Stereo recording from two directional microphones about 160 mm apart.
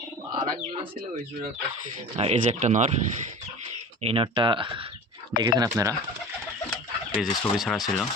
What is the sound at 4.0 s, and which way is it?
Speech, 35° right (ahead or behind).